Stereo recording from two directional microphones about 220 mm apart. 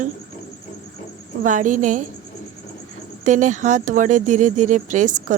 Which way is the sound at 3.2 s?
35° right (ahead or behind).